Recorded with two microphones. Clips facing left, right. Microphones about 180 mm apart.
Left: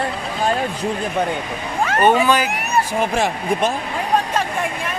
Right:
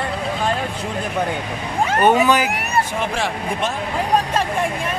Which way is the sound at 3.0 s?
40° left (ahead or behind).